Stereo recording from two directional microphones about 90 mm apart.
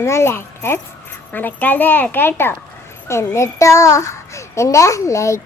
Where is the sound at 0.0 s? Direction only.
30° left (ahead or behind).